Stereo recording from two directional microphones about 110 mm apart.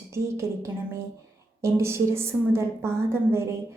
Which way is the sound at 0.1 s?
25° right (ahead or behind).